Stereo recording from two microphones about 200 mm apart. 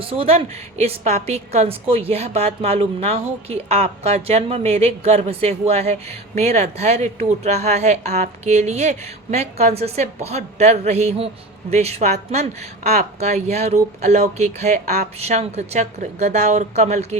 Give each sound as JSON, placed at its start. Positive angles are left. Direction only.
{"t": 0.0, "sound": "a woman's voice", "side_deg": -30}